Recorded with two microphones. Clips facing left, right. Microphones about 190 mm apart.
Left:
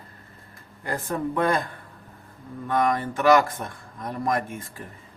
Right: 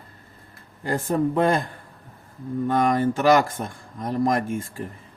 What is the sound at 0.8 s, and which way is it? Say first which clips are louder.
Speech: right 5 dB; 25° right (ahead or behind).